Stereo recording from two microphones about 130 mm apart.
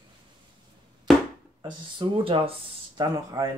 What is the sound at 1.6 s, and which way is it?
Speech, 40° right (ahead or behind).